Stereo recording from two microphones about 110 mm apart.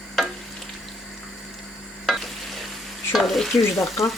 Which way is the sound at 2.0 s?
Centre (ahead or behind).